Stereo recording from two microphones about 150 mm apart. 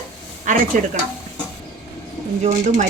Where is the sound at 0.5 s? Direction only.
55° right (ahead or behind).